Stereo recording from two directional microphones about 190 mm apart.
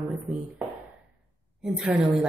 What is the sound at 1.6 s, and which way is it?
Speech, 5° right (ahead or behind).